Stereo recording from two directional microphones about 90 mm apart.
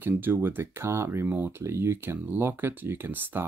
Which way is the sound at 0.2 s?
25° right (ahead or behind).